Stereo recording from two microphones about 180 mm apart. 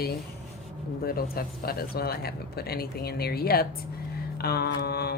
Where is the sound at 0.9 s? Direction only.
55° left (ahead or behind).